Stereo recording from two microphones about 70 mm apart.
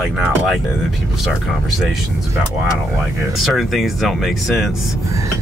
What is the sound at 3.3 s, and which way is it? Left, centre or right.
Speech, centre.